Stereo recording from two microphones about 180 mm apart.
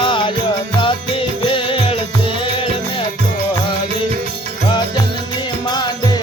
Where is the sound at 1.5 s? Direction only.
30° left (ahead or behind).